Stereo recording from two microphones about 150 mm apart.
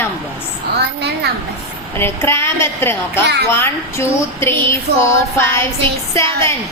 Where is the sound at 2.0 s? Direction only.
15° left (ahead or behind).